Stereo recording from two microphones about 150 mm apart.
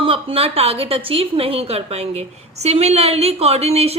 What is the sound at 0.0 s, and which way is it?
A woman's voice, 40° right (ahead or behind).